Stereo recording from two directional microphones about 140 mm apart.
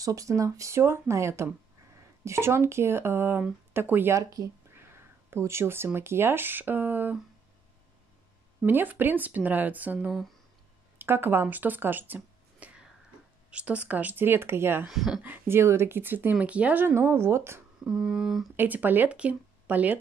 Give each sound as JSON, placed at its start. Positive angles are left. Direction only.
{"t": 0.0, "sound": "speech", "side_deg": -25}
{"t": 8.6, "sound": "a woman's voice", "side_deg": -15}
{"t": 14.9, "sound": "a sound", "side_deg": 0}
{"t": 15.2, "sound": "a woman's voice", "side_deg": -15}
{"t": 17.7, "sound": "a sound", "side_deg": -5}
{"t": 18.6, "sound": "speech", "side_deg": -10}